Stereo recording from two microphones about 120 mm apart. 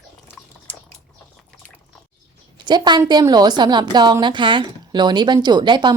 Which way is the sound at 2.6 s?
40° right (ahead or behind).